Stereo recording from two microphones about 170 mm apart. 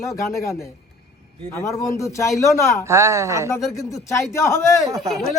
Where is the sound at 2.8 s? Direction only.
15° right (ahead or behind).